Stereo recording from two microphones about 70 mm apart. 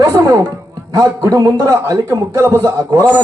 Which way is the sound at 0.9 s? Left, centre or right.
Right.